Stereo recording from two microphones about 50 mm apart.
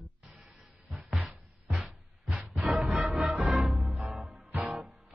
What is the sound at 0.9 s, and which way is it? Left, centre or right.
Music, centre.